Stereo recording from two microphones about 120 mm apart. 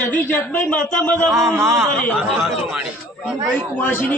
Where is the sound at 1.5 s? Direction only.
20° right (ahead or behind).